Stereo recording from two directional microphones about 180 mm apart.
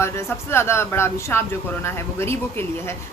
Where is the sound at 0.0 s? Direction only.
15° left (ahead or behind).